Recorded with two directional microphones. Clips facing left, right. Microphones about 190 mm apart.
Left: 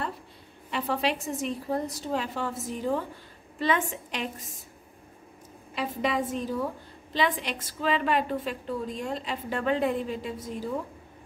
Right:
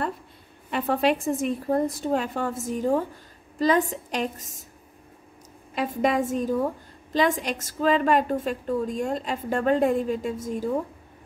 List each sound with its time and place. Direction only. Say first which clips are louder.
0.7 s a woman's voice: right 5 dB; 50° right (ahead or behind)
5.8 s a woman's voice: right 5 dB; 45° right (ahead or behind)